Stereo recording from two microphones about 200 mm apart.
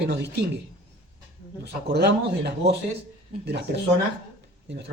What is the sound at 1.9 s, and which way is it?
Speech, 55° right (ahead or behind).